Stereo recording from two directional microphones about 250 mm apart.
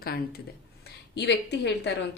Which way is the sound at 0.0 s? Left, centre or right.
Left.